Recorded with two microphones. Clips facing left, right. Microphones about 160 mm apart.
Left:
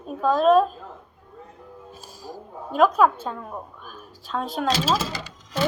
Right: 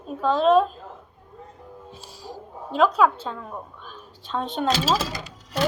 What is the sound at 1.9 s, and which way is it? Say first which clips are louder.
Music: left 1 dB; 50° left (ahead or behind).